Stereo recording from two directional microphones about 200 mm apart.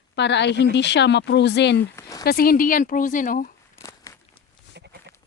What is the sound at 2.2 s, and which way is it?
Speech, 50° left (ahead or behind).